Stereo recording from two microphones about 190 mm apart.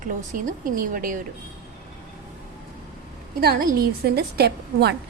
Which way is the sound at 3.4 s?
50° right (ahead or behind).